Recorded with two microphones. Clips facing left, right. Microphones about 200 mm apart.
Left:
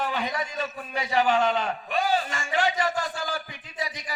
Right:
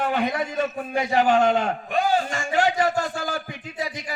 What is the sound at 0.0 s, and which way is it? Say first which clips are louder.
A man's voice: right 5 dB; 55° right (ahead or behind).